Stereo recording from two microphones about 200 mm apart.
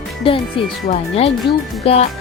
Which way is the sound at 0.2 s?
25° left (ahead or behind).